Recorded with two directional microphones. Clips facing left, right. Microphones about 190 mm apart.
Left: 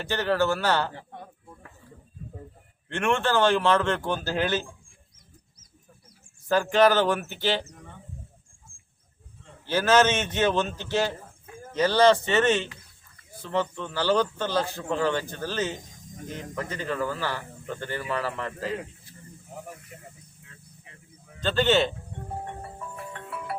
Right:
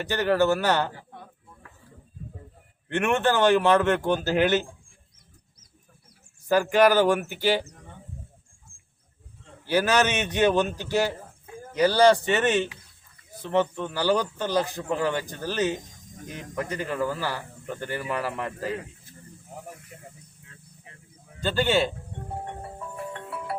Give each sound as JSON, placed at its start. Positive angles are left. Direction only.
{"t": 0.0, "sound": "a man's voice", "side_deg": -15}
{"t": 2.9, "sound": "a man's voice", "side_deg": -20}
{"t": 6.5, "sound": "a man's voice", "side_deg": -10}
{"t": 9.6, "sound": "a man's voice", "side_deg": -15}
{"t": 21.4, "sound": "a man's voice", "side_deg": -10}